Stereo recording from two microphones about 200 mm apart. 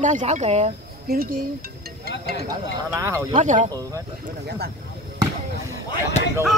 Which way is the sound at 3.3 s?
35° right (ahead or behind).